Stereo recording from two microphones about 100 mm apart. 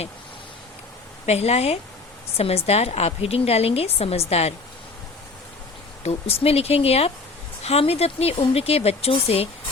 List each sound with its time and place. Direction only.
1.3 s speech: 90° left
6.0 s speech: 90° left